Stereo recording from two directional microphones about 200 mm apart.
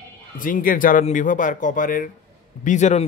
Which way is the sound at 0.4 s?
45° left (ahead or behind).